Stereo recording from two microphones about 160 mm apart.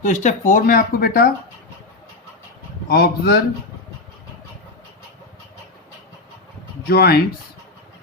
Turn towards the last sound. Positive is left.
turn(degrees=90)